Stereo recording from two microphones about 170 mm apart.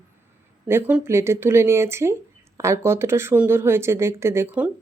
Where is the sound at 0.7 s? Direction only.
10° right (ahead or behind).